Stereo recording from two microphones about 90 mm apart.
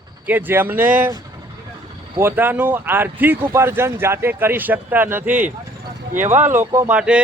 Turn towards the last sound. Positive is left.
turn(degrees=-10)  # may be behind; listen again after turning